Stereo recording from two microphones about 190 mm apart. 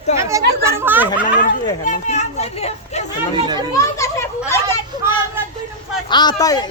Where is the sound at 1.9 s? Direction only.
40° left (ahead or behind).